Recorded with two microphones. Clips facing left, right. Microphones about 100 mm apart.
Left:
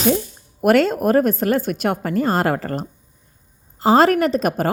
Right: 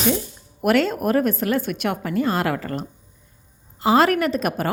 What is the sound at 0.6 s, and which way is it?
A woman's voice, 40° left (ahead or behind).